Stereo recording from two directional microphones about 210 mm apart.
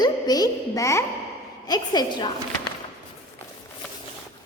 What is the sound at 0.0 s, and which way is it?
A woman's voice, 20° left (ahead or behind).